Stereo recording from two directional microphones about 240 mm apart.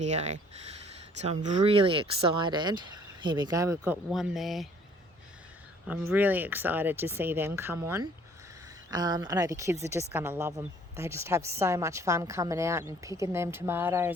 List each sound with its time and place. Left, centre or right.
0.0 s speech: right; by 3.9 s centre
4.1 s speech: centre
5.9 s a woman's voice: centre